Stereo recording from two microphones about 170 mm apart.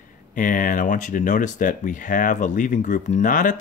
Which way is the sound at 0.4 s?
50° left (ahead or behind).